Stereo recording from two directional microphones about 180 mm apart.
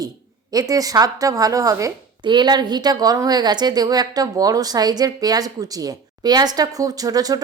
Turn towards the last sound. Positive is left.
turn(degrees=-20)  # may be behind; listen again after turning